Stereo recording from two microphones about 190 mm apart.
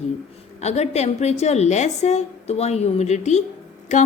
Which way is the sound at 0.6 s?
35° left (ahead or behind).